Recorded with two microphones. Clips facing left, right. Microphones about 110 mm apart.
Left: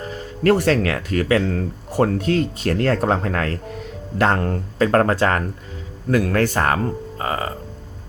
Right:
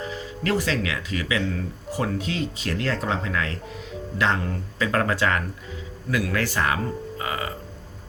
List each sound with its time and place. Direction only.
0.0 s speech: 45° left (ahead or behind)